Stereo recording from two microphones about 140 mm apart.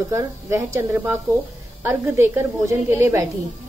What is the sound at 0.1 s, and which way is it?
A woman's voice, 20° right (ahead or behind).